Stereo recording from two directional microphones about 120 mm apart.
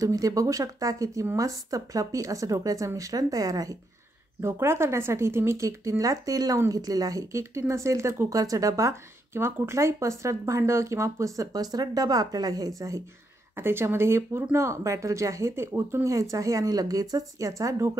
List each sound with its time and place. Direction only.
0.0 s speech: 30° right (ahead or behind)